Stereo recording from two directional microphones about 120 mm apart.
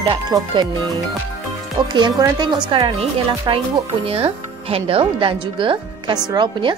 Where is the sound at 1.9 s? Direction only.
40° right (ahead or behind).